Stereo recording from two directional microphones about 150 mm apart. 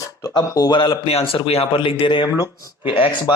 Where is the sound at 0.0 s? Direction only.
25° left (ahead or behind).